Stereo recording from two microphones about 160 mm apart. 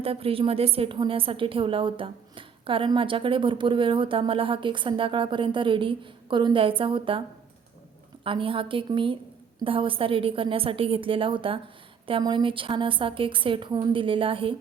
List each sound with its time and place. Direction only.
0.0 s a woman's voice: 35° right (ahead or behind)
8.2 s a woman's voice: 35° right (ahead or behind)